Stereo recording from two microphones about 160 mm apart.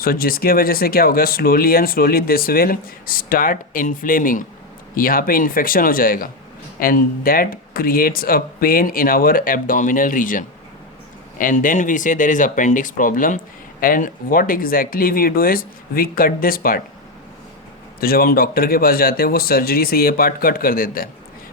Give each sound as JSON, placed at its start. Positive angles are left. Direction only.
{"t": 0.0, "sound": "speech", "side_deg": 70}
{"t": 18.0, "sound": "speech", "side_deg": 65}